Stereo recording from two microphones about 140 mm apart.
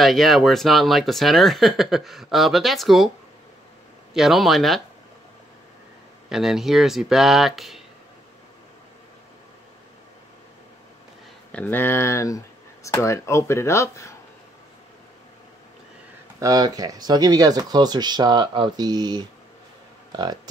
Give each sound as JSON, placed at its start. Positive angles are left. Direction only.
{"t": 0.0, "sound": "speech", "side_deg": 0}
{"t": 4.1, "sound": "speech", "side_deg": 0}
{"t": 6.2, "sound": "speech", "side_deg": -5}
{"t": 11.5, "sound": "speech", "side_deg": 15}
{"t": 16.3, "sound": "speech", "side_deg": -25}